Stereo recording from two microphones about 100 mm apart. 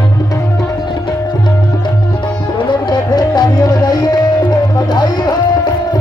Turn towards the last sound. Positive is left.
turn(degrees=45)  # may be behind; listen again after turning